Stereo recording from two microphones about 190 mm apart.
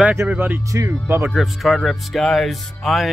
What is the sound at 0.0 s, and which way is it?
Speech, 10° right (ahead or behind).